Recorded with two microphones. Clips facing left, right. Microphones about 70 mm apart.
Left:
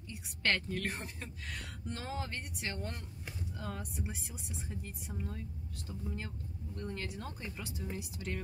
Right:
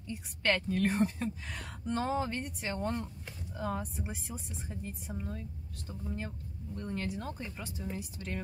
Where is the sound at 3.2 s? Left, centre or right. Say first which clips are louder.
Left 1 dB; centre.